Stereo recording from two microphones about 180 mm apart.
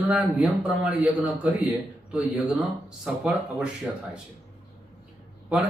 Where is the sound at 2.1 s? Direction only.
5° right (ahead or behind).